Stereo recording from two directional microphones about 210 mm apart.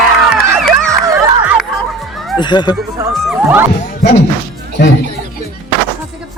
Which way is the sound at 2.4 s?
20° left (ahead or behind).